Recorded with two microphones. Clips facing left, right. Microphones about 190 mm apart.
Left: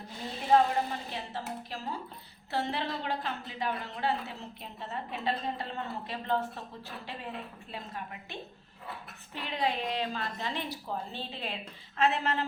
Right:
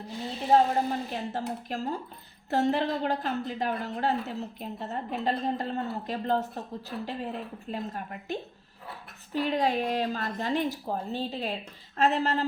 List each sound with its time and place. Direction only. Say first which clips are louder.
0.5 s a woman's voice: right 2 dB; 45° right (ahead or behind)